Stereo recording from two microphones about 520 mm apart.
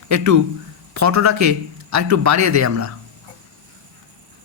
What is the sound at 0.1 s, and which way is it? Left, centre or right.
Speech, right.